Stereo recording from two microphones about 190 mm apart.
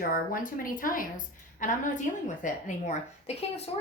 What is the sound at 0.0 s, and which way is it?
A woman's voice, 45° left (ahead or behind).